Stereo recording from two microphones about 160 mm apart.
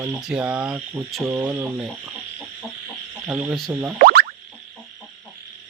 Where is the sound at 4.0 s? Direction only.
75° right (ahead or behind).